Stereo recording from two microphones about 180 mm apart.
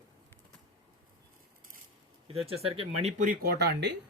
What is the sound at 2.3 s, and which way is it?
Speech, 35° right (ahead or behind).